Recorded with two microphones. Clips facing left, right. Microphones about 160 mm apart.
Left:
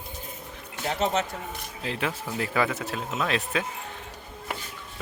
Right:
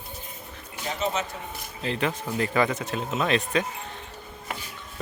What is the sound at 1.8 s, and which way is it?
Speech, 5° left (ahead or behind).